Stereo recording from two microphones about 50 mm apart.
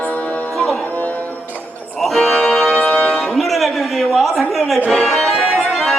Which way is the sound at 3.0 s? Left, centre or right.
Centre.